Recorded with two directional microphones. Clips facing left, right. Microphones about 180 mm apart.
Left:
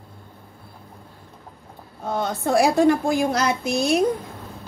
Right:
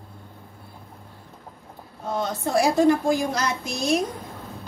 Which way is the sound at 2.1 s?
55° left (ahead or behind).